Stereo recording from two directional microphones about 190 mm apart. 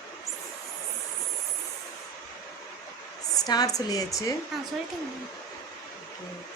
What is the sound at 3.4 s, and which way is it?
Speech, 20° left (ahead or behind).